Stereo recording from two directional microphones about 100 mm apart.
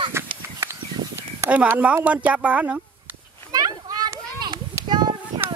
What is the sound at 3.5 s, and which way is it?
Children playing, 40° right (ahead or behind).